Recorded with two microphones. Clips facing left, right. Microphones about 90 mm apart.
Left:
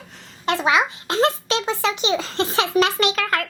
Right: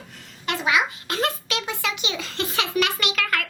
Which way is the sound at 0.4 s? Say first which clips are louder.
Left 4 dB; 30° left (ahead or behind).